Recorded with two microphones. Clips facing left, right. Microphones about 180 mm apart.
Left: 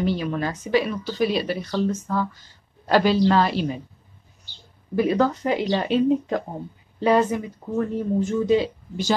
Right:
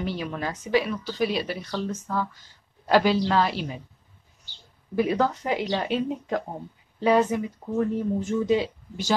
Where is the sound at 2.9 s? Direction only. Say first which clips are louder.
Left 3 dB; 10° right (ahead or behind).